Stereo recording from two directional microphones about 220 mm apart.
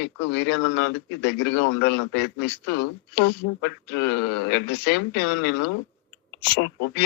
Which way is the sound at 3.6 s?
50° left (ahead or behind).